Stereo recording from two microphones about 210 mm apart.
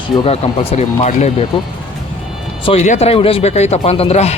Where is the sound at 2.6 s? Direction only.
35° left (ahead or behind).